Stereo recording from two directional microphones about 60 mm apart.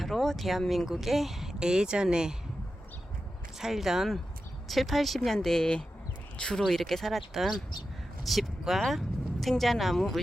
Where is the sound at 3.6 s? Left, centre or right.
Centre.